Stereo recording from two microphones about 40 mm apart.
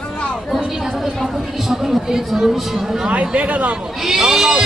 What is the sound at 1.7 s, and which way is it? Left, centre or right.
Speech, centre.